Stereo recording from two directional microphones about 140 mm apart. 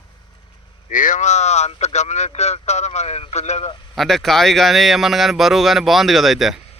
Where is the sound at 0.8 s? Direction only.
70° left (ahead or behind); by 3.7 s 50° left (ahead or behind).